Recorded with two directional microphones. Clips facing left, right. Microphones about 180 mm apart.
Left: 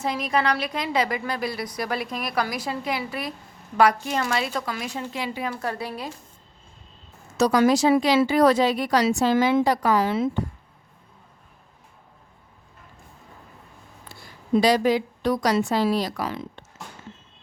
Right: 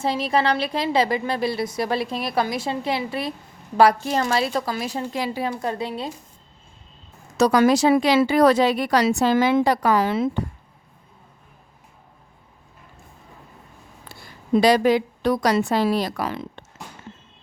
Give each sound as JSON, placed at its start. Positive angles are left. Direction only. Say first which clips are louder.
{"t": 0.0, "sound": "a woman's voice", "louder": "right 3 dB", "side_deg": -30}
{"t": 5.6, "sound": "a woman's voice", "louder": "right 3 dB", "side_deg": -20}
{"t": 7.3, "sound": "speech", "louder": "right 2 dB", "side_deg": -65}
{"t": 14.5, "sound": "speech", "louder": "right 3 dB", "side_deg": -60}